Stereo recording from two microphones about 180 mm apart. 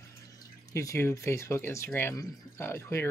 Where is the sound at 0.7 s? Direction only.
15° left (ahead or behind).